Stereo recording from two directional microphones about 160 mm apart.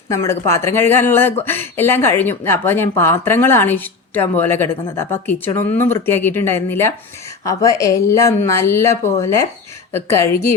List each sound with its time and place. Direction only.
0.1 s speech: 15° left (ahead or behind)